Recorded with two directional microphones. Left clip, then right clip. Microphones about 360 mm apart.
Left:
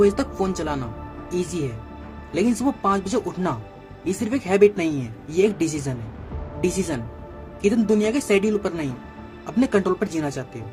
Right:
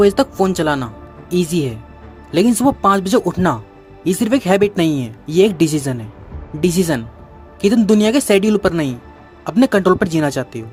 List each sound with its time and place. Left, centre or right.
0.0 s speech: right